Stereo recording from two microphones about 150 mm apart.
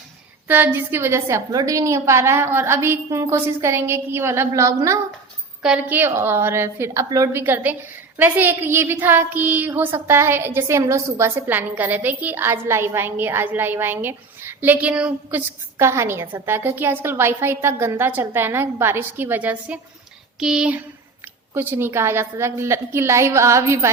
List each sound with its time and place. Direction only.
0.4 s a woman's voice: 15° right (ahead or behind)
5.6 s a woman's voice: 10° right (ahead or behind)